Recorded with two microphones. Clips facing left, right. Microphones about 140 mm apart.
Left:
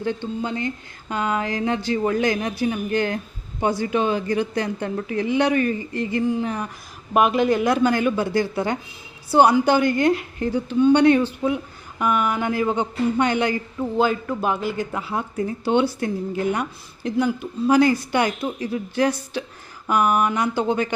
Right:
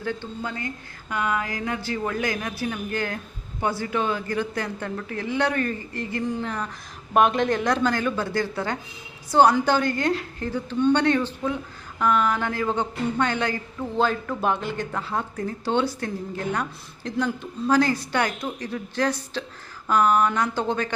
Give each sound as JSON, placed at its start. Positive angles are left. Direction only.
{"t": 0.0, "sound": "a woman's voice", "side_deg": 20}
{"t": 7.1, "sound": "a woman's voice", "side_deg": 5}